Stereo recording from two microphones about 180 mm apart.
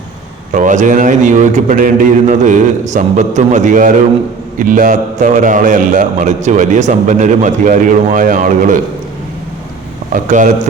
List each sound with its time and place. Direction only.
0.5 s a man's voice: 45° right (ahead or behind)
10.1 s speech: 45° right (ahead or behind)